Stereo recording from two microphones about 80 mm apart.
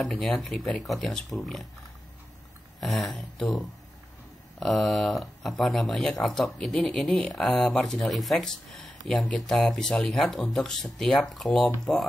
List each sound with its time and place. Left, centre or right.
0.0 s speech: centre
2.8 s speech: centre